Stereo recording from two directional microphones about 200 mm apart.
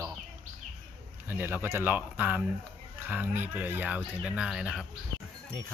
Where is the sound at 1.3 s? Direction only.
10° right (ahead or behind).